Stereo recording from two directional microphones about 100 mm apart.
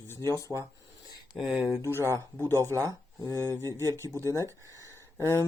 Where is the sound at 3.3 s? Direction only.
30° right (ahead or behind).